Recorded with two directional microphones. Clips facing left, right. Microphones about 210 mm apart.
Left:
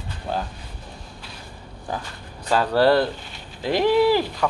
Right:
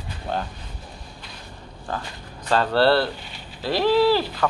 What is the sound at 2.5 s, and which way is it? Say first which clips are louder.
Speech: left 1 dB; 10° left (ahead or behind).